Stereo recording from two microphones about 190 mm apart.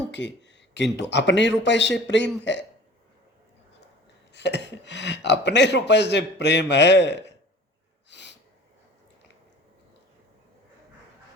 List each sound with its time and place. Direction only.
0.1 s a sound: 70° left (ahead or behind)
0.9 s speech: 65° left (ahead or behind)
4.3 s speech: 65° left (ahead or behind)
8.1 s gasp: 65° left (ahead or behind)